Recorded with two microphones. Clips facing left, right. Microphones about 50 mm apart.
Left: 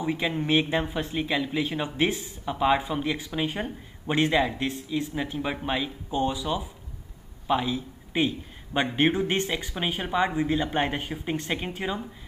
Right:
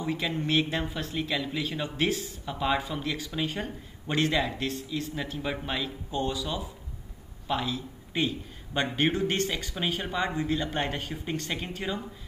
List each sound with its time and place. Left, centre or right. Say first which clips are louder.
0.0 s speech: left 3 dB; centre